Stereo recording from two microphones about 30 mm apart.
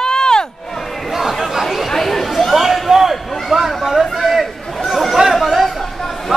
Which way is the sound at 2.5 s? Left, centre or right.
Centre.